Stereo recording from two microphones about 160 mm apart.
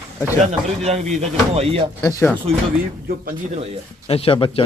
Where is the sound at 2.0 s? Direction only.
15° left (ahead or behind).